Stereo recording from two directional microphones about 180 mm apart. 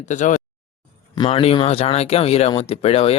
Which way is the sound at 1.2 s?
30° left (ahead or behind).